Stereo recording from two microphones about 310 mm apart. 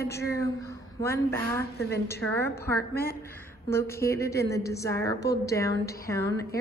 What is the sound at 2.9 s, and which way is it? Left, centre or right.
Speech, left.